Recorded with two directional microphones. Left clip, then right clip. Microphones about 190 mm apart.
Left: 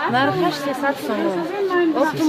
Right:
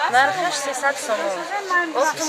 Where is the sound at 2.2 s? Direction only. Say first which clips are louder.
Left 6 dB; 15° left (ahead or behind).